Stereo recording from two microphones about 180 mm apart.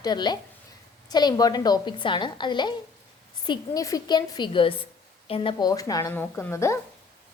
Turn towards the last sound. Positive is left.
turn(degrees=15)  # may be behind; listen again after turning